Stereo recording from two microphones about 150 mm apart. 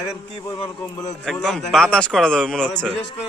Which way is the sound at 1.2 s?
5° left (ahead or behind).